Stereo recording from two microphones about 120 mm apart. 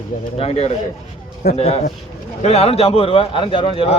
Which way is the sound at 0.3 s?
55° left (ahead or behind).